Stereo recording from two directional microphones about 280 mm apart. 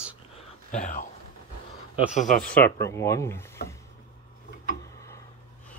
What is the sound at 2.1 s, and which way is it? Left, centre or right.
Speech, left.